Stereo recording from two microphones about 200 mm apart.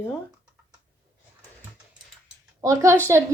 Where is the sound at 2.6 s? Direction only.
15° right (ahead or behind).